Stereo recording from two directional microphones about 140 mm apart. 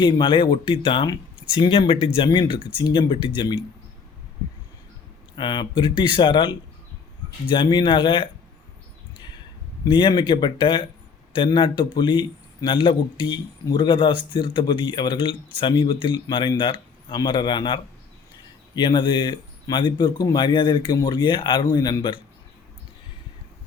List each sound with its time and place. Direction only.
0.0 s a man's voice: 35° left (ahead or behind)
5.4 s a man's voice: 35° left (ahead or behind)
9.8 s a man's voice: 35° left (ahead or behind)